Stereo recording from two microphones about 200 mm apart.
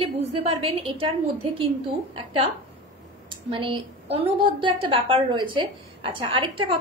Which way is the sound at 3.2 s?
25° right (ahead or behind).